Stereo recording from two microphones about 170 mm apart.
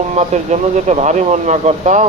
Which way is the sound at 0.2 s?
40° right (ahead or behind).